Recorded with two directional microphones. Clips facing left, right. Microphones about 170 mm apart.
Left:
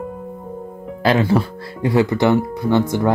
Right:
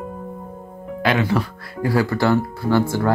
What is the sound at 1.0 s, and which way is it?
Speech, 35° left (ahead or behind).